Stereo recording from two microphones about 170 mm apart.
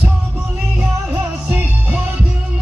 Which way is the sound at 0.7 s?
10° right (ahead or behind).